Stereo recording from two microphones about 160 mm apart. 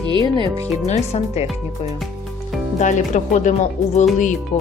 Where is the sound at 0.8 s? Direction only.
45° left (ahead or behind).